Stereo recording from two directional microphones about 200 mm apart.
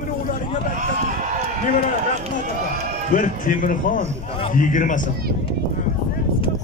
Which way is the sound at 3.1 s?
40° left (ahead or behind).